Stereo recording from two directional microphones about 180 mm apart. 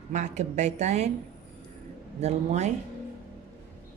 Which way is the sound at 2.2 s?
40° right (ahead or behind).